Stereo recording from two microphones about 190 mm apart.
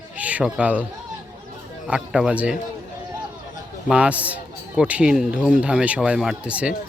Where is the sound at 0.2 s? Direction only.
5° right (ahead or behind).